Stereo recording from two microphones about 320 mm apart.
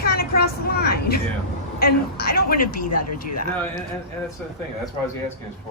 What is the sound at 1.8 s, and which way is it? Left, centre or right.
Speech, left.